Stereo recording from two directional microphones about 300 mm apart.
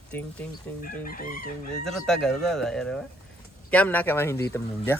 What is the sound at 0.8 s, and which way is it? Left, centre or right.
Chicken, left.